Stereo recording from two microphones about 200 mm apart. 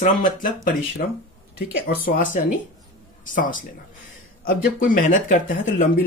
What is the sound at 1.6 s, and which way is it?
Speech, 45° left (ahead or behind).